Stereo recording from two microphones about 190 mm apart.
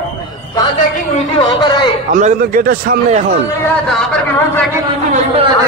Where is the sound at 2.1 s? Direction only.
45° right (ahead or behind).